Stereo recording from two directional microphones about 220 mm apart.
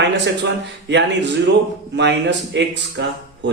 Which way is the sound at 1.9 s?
50° right (ahead or behind).